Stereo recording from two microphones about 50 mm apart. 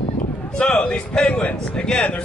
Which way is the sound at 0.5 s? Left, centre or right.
Left.